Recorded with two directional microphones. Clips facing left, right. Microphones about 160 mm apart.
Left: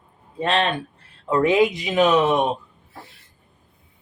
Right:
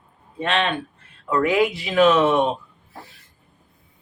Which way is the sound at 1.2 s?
25° left (ahead or behind).